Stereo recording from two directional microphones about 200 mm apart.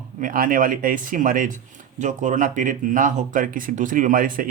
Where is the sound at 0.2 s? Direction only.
45° right (ahead or behind).